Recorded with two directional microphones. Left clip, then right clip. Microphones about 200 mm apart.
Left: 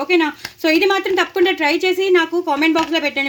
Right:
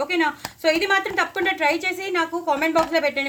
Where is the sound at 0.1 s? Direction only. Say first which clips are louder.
Left 5 dB; 40° left (ahead or behind).